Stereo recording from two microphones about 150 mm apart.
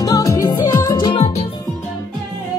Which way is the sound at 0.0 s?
25° left (ahead or behind).